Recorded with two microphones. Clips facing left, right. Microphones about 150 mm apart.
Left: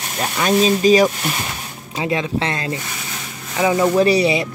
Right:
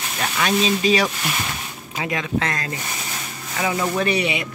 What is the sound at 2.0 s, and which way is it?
Speech, 30° left (ahead or behind).